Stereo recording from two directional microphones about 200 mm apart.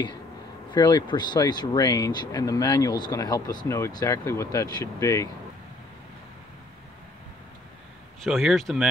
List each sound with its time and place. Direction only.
0.7 s speech: 20° left (ahead or behind)
8.2 s speech: centre (ahead or behind)